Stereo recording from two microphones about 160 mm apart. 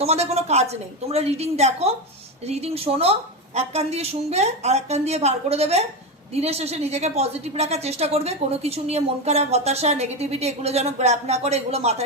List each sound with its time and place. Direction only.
0.0 s a woman's voice: 40° right (ahead or behind)